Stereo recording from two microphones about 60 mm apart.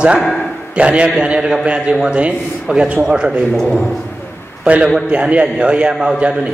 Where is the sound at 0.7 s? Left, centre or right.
Centre.